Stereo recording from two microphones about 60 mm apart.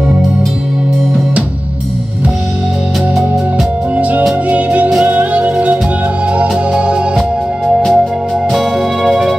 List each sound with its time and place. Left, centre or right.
3.9 s music: right
6.5 s music: centre
7.2 s music: centre